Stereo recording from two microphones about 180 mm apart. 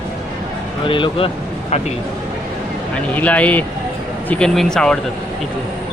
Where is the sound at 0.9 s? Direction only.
30° left (ahead or behind).